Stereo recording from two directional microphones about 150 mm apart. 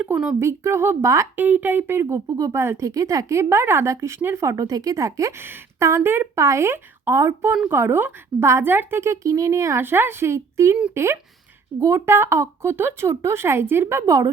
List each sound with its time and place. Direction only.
0.0 s a woman's voice: 5° right (ahead or behind)
0.3 s a woman's voice: 20° right (ahead or behind)